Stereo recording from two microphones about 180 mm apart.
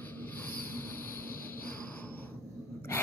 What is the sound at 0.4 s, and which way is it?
Train, 10° left (ahead or behind).